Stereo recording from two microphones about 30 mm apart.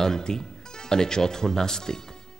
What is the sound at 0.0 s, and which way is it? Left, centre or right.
Speech, left.